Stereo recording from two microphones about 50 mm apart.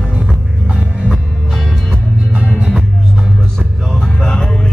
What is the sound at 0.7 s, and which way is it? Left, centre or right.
Music, centre.